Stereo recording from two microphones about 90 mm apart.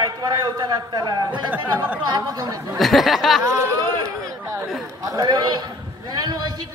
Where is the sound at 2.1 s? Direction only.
45° right (ahead or behind).